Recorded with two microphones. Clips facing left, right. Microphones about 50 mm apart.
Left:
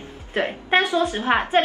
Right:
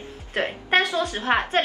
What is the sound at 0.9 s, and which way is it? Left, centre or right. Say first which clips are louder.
Speech: left 4 dB; left.